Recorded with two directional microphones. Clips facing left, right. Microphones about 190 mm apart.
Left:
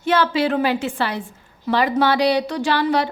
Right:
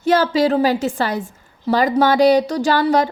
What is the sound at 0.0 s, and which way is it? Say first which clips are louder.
A woman's voice: right 3 dB; 40° right (ahead or behind).